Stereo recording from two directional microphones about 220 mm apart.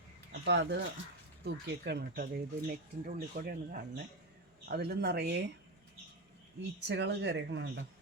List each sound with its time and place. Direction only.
0.4 s speech: 50° right (ahead or behind)
6.8 s speech: 50° right (ahead or behind)